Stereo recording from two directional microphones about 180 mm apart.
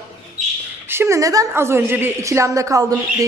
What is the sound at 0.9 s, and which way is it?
Speech, 15° right (ahead or behind).